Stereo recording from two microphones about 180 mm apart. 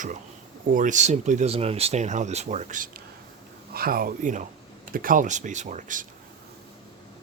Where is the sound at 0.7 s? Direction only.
45° right (ahead or behind).